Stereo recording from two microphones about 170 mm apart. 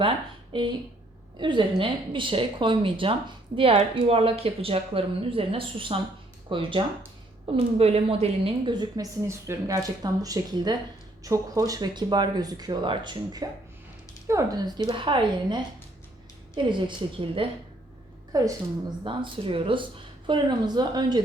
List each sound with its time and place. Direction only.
0.5 s speech: 30° right (ahead or behind)